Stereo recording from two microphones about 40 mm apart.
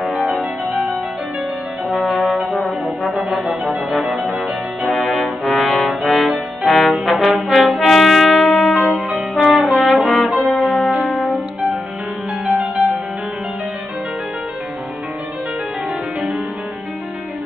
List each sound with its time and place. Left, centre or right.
2.5 s brass instrument: centre
3.3 s music: right
5.1 s brass instrument: centre
6.6 s trombone: centre
7.5 s brass instrument: centre
10.0 s music: centre